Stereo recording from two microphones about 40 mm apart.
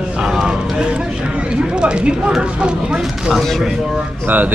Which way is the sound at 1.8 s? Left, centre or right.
Right.